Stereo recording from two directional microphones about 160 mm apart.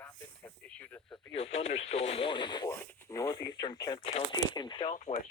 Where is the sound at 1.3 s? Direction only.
40° left (ahead or behind).